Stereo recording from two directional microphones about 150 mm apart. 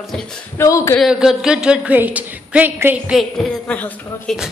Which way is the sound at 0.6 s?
20° left (ahead or behind).